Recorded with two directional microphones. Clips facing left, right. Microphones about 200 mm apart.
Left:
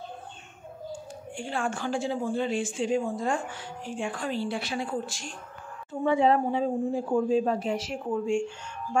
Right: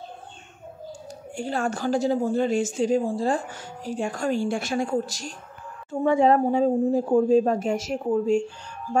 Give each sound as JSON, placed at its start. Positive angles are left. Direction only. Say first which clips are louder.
{"t": 1.3, "sound": "a woman's voice", "louder": "right 4 dB", "side_deg": -40}